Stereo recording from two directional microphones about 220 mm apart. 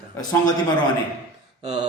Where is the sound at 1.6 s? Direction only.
20° right (ahead or behind).